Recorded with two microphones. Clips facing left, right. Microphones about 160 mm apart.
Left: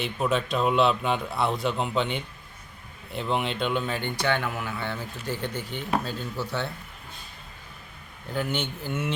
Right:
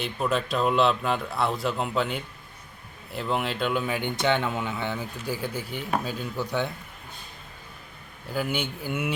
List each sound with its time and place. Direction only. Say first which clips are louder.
0.0 s a man's voice: left 1 dB; centre (ahead or behind)
4.2 s speech: right 3 dB; 20° right (ahead or behind)
8.3 s speech: even; 5° right (ahead or behind)